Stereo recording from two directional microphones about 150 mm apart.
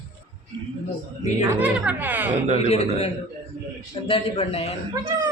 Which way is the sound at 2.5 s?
45° left (ahead or behind).